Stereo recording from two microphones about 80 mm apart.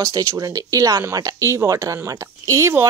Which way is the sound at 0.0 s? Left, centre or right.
Right.